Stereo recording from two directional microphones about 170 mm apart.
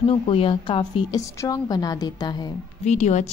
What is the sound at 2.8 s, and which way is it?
Speech, 40° left (ahead or behind).